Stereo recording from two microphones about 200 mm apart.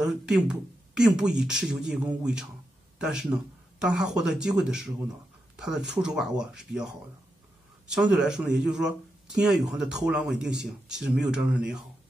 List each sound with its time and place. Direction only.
0.0 s speech: 5° right (ahead or behind)
7.9 s speech: 5° right (ahead or behind)